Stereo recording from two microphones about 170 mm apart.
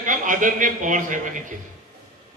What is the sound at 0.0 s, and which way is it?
A man's voice, 50° right (ahead or behind).